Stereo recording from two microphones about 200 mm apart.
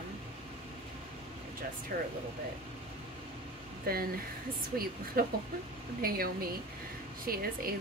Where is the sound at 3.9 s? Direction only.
50° right (ahead or behind).